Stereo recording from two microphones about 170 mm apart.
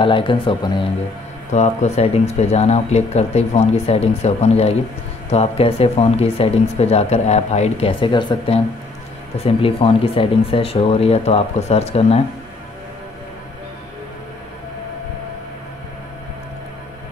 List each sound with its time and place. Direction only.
0.0 s speech: 30° left (ahead or behind)
1.5 s speech: 45° left (ahead or behind)